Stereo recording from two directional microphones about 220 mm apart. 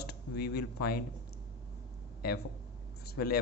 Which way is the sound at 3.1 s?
45° left (ahead or behind).